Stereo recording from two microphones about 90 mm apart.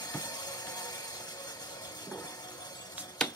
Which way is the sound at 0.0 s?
50° left (ahead or behind).